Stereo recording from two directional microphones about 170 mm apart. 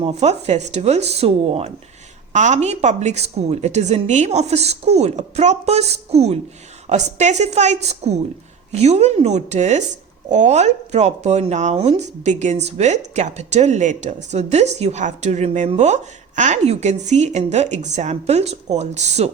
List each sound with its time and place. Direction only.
0.0 s a woman's voice: 40° right (ahead or behind)